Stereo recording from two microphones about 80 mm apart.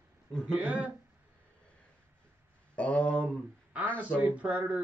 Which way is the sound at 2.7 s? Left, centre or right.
Centre.